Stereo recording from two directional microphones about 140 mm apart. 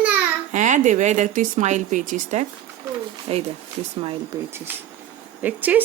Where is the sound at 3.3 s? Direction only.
50° right (ahead or behind).